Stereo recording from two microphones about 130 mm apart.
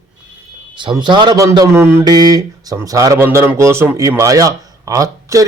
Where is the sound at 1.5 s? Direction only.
20° right (ahead or behind).